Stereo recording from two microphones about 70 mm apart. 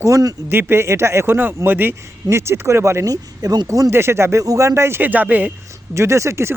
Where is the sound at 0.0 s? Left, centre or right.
Right.